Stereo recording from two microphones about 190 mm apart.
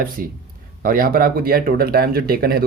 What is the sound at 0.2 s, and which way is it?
Speech, 45° right (ahead or behind).